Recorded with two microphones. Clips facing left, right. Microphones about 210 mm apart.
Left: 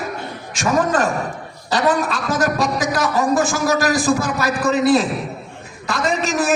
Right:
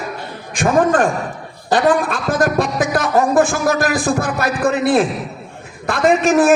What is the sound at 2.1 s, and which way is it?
A man's voice, 50° right (ahead or behind).